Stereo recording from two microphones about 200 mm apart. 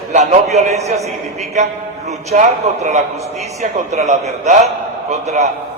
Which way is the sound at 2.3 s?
35° right (ahead or behind).